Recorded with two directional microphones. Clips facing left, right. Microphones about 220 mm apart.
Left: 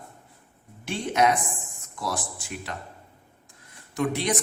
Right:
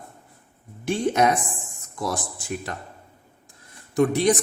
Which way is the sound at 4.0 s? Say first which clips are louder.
Right 7 dB; 50° right (ahead or behind).